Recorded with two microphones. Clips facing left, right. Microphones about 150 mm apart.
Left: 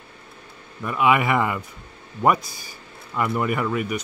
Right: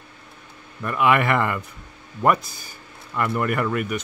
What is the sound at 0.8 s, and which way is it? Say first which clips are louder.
Speech: even; 5° left (ahead or behind).